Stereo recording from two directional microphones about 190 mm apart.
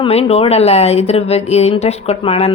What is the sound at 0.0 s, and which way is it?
A woman's voice, 30° left (ahead or behind).